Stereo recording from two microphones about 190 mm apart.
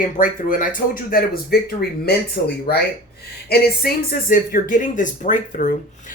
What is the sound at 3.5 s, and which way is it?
Speech, 55° left (ahead or behind).